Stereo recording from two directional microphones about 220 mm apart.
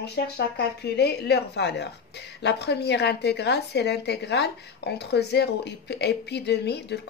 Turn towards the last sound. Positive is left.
turn(degrees=50)  # may be behind; listen again after turning